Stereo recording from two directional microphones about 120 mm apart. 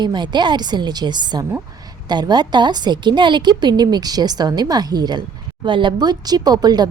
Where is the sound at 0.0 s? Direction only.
40° right (ahead or behind).